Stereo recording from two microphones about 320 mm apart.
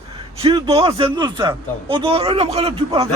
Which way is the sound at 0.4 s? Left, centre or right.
Centre.